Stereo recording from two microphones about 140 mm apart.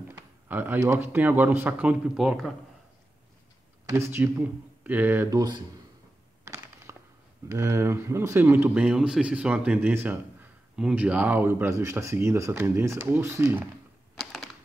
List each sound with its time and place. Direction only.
0.1 s speech: 15° right (ahead or behind)
3.9 s speech: 15° right (ahead or behind)
6.9 s a sound: 20° right (ahead or behind)
7.5 s speech: 20° right (ahead or behind)
14.1 s typewriter: centre (ahead or behind)